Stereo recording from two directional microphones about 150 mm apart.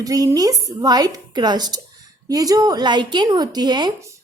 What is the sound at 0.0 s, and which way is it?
A woman's voice, 25° right (ahead or behind).